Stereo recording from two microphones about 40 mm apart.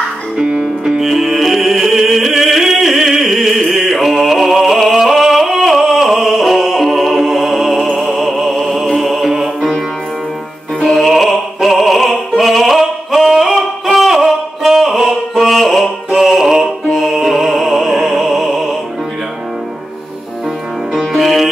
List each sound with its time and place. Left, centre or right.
0.4 s music: right
0.8 s music: centre
10.9 s opera: centre
14.0 s music: centre
16.1 s music: centre
16.9 s music: centre
21.0 s music: centre